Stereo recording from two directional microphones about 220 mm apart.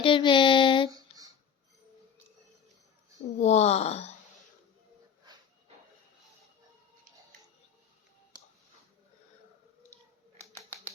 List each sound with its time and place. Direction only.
0.0 s child singing: 20° left (ahead or behind)
0.9 s a sound: 15° right (ahead or behind)
3.3 s speech: 30° left (ahead or behind)